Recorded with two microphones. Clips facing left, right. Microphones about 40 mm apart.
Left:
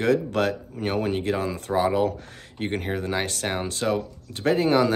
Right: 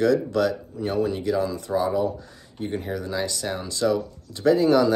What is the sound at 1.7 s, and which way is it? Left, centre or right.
Speech, left.